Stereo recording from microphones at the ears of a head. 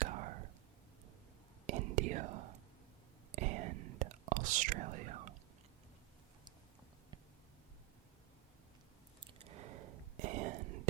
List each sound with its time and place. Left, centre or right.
0.0 s whispering: right
1.6 s whispering: right
9.2 s a sound: right